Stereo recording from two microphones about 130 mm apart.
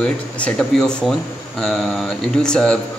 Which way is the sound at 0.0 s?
10° left (ahead or behind).